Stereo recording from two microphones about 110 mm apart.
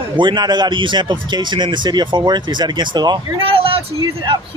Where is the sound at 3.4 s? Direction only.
55° right (ahead or behind).